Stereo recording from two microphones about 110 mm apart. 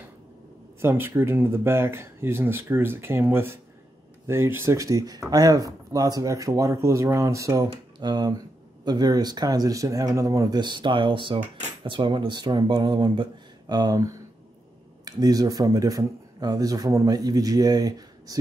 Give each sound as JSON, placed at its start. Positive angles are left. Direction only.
{"t": 0.7, "sound": "speech", "side_deg": -20}
{"t": 8.0, "sound": "speech", "side_deg": -40}
{"t": 10.6, "sound": "speech", "side_deg": -45}